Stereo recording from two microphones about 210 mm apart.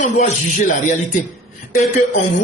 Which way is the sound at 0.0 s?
35° left (ahead or behind).